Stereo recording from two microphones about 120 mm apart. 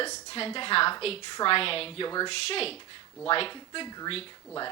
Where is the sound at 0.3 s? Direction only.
50° left (ahead or behind).